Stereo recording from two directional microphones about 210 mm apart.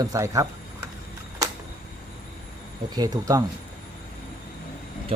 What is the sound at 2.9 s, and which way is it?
Speech, 20° right (ahead or behind).